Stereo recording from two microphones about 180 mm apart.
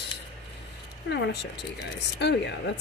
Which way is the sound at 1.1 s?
70° left (ahead or behind).